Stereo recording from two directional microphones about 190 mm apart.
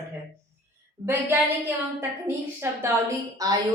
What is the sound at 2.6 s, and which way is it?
Speech, 15° right (ahead or behind).